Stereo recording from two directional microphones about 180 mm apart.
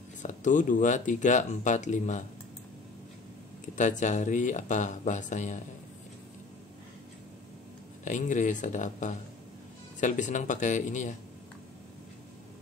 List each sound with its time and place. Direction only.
0.2 s speech: 45° left (ahead or behind)
3.7 s speech: 45° left (ahead or behind)
8.0 s speech: 45° left (ahead or behind)